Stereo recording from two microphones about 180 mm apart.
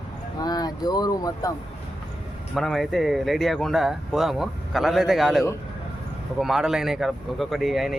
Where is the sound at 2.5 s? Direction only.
Centre (ahead or behind).